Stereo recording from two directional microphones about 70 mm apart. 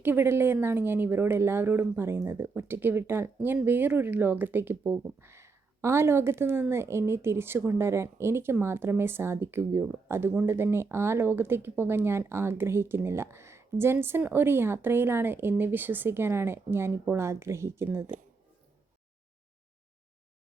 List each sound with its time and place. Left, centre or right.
0.0 s speech: right